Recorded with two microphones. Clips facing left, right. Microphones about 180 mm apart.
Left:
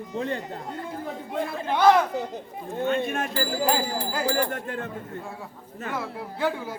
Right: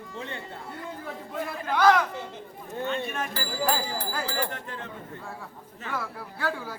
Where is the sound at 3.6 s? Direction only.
15° left (ahead or behind).